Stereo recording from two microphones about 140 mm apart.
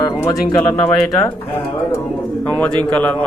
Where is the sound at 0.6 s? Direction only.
15° left (ahead or behind).